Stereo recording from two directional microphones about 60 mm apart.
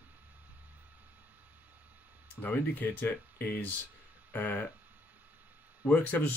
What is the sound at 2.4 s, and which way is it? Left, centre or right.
Speech, left.